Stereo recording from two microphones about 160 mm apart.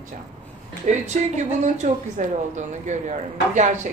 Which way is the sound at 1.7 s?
45° right (ahead or behind).